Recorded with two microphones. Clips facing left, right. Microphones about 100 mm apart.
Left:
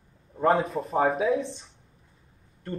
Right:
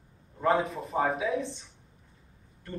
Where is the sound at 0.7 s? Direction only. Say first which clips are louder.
Left 4 dB; 30° left (ahead or behind).